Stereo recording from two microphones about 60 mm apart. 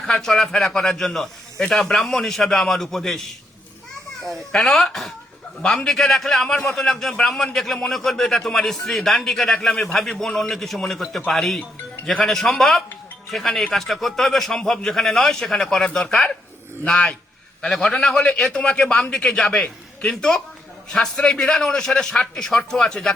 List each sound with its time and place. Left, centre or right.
0.0 s a man's voice: centre
17.6 s a man's voice: centre